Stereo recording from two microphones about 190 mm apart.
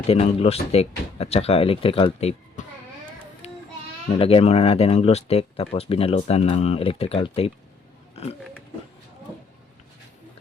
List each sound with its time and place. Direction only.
0.1 s speech: 30° left (ahead or behind)
3.4 s child singing: 35° left (ahead or behind)
4.2 s speech: 30° left (ahead or behind)
8.1 s pig: 35° left (ahead or behind)